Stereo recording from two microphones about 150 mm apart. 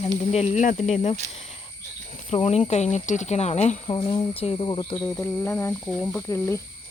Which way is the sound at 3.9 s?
35° left (ahead or behind).